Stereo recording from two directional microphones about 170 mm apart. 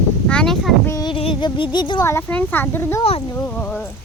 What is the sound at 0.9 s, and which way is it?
Child singing, 20° left (ahead or behind).